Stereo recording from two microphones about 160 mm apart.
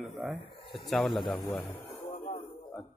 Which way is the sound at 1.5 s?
15° left (ahead or behind).